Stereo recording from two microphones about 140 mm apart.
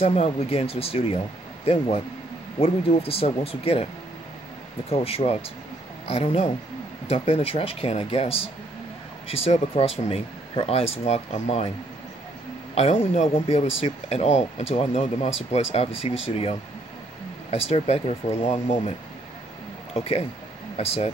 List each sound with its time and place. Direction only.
0.0 s speech: 45° left (ahead or behind)
12.7 s speech: 50° left (ahead or behind)
19.9 s speech: 50° left (ahead or behind)